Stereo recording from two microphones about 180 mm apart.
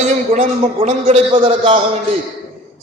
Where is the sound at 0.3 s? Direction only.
40° right (ahead or behind).